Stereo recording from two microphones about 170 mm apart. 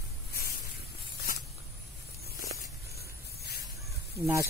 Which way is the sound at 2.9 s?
70° left (ahead or behind).